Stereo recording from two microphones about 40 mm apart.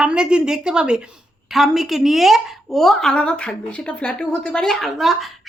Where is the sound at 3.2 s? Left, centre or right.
Left.